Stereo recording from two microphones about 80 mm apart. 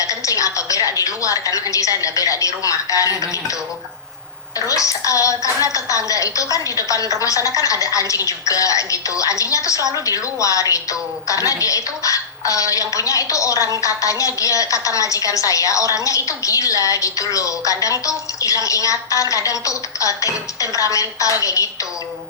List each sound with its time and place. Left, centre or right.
0.0 s music: left
0.9 s a woman's voice: left
4.6 s a woman's voice: left